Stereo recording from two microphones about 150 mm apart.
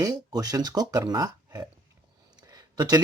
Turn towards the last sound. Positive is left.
turn(degrees=-25)  # may be behind; listen again after turning